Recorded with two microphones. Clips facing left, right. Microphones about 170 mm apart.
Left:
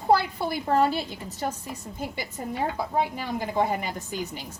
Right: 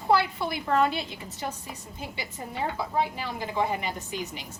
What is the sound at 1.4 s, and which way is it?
Speech, 45° left (ahead or behind).